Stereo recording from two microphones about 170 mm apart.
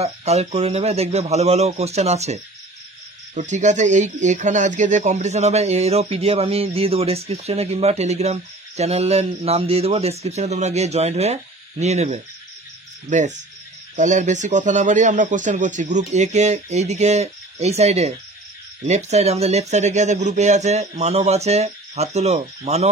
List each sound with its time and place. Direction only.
0.0 s speech: 40° right (ahead or behind)